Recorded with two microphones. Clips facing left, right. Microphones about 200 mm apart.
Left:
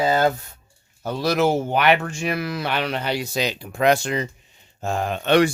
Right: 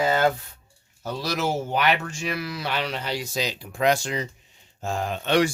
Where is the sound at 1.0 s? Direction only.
55° left (ahead or behind).